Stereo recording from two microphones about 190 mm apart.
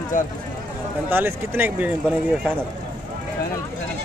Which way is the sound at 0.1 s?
45° left (ahead or behind).